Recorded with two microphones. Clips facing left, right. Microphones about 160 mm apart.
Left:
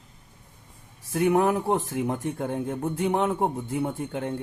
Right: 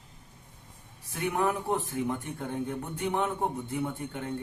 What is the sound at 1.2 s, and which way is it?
Speech, 40° left (ahead or behind).